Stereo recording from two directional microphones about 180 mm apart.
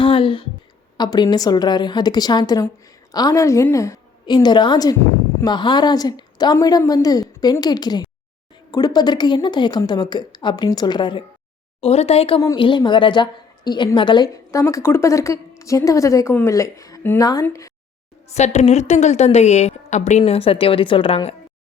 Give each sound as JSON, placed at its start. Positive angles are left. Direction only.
{"t": 0.0, "sound": "a sound", "side_deg": 30}
{"t": 0.9, "sound": "a woman's voice", "side_deg": 25}
{"t": 18.3, "sound": "a woman's voice", "side_deg": 40}